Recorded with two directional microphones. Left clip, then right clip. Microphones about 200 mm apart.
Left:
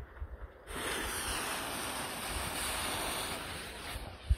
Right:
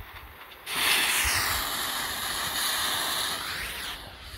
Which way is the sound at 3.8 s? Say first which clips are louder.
Right 7 dB; 15° left (ahead or behind).